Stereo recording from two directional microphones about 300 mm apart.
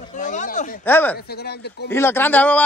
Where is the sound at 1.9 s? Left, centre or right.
Centre.